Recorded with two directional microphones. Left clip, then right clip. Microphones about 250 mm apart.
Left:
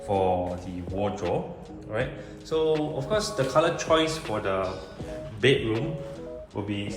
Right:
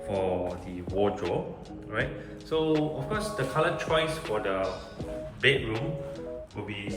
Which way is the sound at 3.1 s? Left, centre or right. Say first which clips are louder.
Left 6 dB; centre.